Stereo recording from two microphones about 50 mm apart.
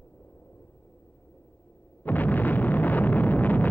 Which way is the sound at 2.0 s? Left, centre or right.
Left.